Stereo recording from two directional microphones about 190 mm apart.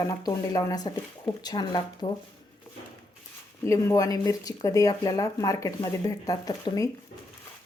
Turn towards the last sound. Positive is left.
turn(degrees=20)  # may be behind; listen again after turning